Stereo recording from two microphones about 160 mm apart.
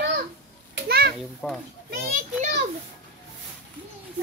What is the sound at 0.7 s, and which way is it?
Children playing, 85° right.